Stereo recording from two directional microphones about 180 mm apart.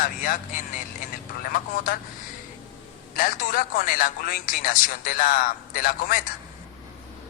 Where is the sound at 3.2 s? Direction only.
50° left (ahead or behind).